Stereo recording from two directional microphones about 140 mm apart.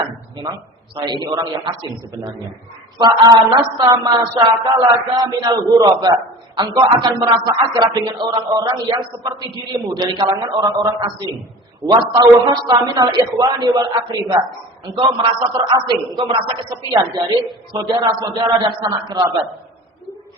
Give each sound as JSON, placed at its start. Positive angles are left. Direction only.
{"t": 1.0, "sound": "speech", "side_deg": -30}
{"t": 3.0, "sound": "a woman's voice", "side_deg": -30}